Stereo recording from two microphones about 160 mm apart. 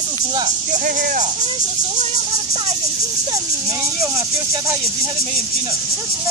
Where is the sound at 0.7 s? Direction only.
55° right (ahead or behind).